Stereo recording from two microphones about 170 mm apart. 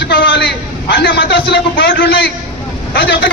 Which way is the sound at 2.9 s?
90° left.